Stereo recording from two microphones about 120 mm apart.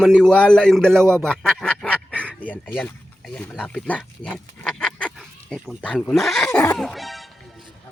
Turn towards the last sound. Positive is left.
turn(degrees=0)  # may be behind; listen again after turning